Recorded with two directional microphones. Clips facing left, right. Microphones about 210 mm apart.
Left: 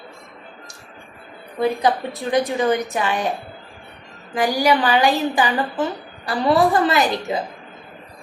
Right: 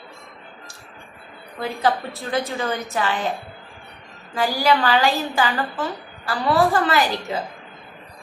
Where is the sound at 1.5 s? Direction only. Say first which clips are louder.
Left 3 dB; 15° left (ahead or behind).